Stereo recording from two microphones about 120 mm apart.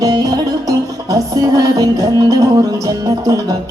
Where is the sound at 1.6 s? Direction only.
30° right (ahead or behind).